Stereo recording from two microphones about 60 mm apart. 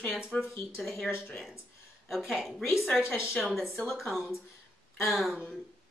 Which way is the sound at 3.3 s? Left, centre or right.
Centre.